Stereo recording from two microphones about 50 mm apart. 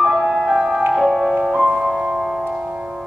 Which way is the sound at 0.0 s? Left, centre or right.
Centre.